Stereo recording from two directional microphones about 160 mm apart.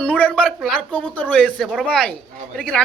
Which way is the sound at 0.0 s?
10° left (ahead or behind).